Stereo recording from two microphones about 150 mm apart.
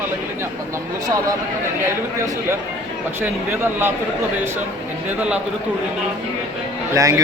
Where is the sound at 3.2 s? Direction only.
15° right (ahead or behind).